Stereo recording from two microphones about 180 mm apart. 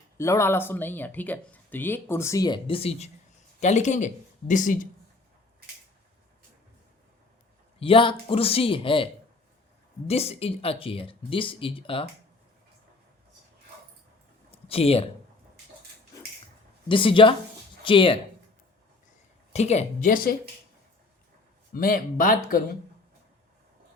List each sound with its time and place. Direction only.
0.2 s speech: 15° left (ahead or behind); by 4.9 s 45° left (ahead or behind)
7.8 s speech: 30° left (ahead or behind)
10.1 s speech: 35° left (ahead or behind)
14.5 s a sound: 30° left (ahead or behind)
16.9 s speech: 30° left (ahead or behind)
19.5 s speech: 40° left (ahead or behind)
21.7 s speech: 55° left (ahead or behind)